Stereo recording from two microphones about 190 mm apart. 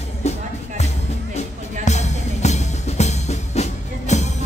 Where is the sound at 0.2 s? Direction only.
35° left (ahead or behind).